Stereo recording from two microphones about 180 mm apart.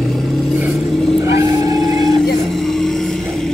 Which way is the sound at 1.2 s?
15° right (ahead or behind).